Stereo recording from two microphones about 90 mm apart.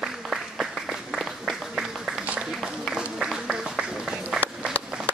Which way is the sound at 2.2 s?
10° right (ahead or behind).